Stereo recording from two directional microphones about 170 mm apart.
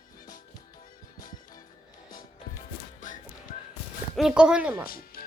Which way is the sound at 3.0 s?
50° left (ahead or behind).